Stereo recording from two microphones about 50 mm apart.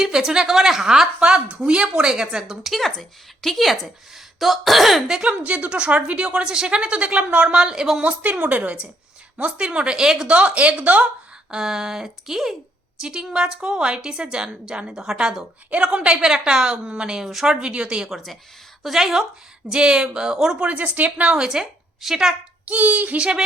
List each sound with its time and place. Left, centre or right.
0.0 s a woman's voice: centre
1.2 s a woman's voice: centre
5.3 s a woman's voice: right; by 8.0 s centre
8.0 s a woman's voice: right; by 10.2 s centre
10.2 s a woman's voice: right
11.5 s a woman's voice: centre
17.6 s a woman's voice: right
18.1 s a woman's voice: centre
20.7 s a woman's voice: right
21.3 s a woman's voice: centre
22.6 s speech: right